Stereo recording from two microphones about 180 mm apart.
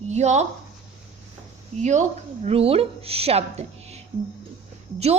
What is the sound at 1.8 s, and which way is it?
A woman's voice, 40° right (ahead or behind).